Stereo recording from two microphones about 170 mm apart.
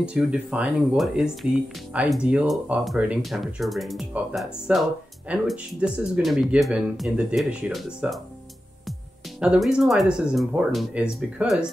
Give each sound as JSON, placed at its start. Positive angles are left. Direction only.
{"t": 0.0, "sound": "speech", "side_deg": -5}
{"t": 9.4, "sound": "speech", "side_deg": -5}